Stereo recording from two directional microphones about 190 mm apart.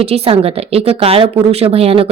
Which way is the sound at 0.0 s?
30° right (ahead or behind).